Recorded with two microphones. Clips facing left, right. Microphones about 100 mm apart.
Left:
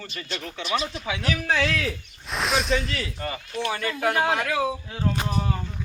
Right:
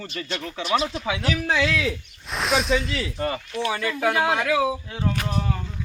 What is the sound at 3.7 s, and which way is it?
Speech, centre (ahead or behind).